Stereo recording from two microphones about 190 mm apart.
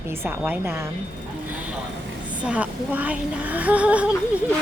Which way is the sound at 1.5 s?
10° right (ahead or behind).